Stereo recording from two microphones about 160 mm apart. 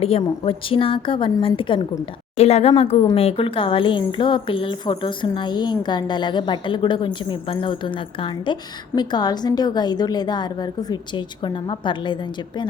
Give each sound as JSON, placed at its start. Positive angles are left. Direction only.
{"t": 0.0, "sound": "a woman's voice", "side_deg": 40}